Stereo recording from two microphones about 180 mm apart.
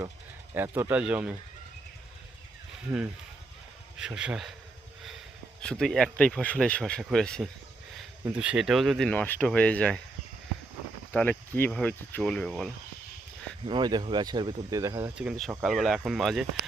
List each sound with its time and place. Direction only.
0.5 s speech: 10° right (ahead or behind)
3.9 s speech: 5° right (ahead or behind)
5.6 s speech: 5° left (ahead or behind)
8.2 s speech: 5° right (ahead or behind)
11.1 s speech: 10° left (ahead or behind)
13.7 s speech: 25° right (ahead or behind)
15.1 s speech: 5° right (ahead or behind)